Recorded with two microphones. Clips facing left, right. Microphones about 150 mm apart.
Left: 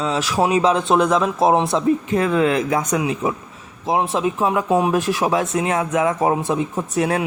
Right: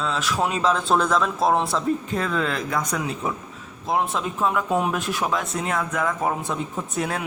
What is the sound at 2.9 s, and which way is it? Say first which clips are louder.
Speech: left 6 dB; 15° left (ahead or behind).